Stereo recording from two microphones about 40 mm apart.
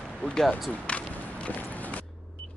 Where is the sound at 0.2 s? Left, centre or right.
Left.